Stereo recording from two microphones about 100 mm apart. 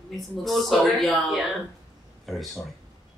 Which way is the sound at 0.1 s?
Centre (ahead or behind).